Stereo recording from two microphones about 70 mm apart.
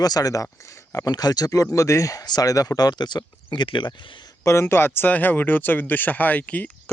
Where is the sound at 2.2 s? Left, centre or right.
Left.